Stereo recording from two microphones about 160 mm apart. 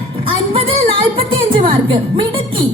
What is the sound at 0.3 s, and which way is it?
Music, 35° right (ahead or behind).